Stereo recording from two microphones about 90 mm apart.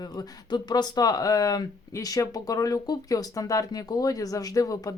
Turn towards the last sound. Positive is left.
turn(degrees=40)  # may be behind; listen again after turning